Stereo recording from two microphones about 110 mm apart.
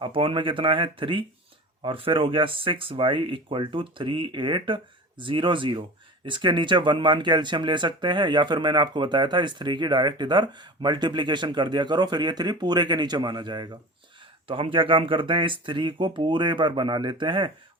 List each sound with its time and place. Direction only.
0.0 s speech: 55° right (ahead or behind)
14.4 s speech: 55° right (ahead or behind)